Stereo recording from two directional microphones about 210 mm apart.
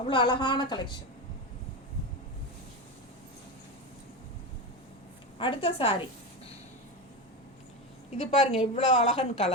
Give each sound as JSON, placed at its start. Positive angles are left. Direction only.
{"t": 0.1, "sound": "a woman's voice", "side_deg": 20}
{"t": 5.4, "sound": "a woman's voice", "side_deg": 25}
{"t": 8.2, "sound": "a woman's voice", "side_deg": 35}